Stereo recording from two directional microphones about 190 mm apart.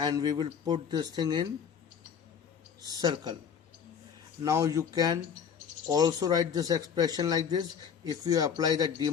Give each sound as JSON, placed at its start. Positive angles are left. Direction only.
{"t": 0.0, "sound": "speech", "side_deg": -20}
{"t": 2.8, "sound": "speech", "side_deg": -20}
{"t": 4.4, "sound": "speech", "side_deg": -15}